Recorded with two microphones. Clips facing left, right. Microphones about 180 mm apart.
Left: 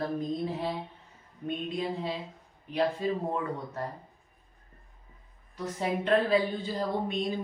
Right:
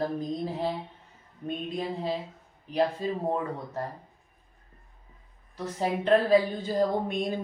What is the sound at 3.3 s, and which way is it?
Speech, 30° right (ahead or behind).